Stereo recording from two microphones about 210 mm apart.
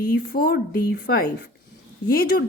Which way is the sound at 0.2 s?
50° left (ahead or behind).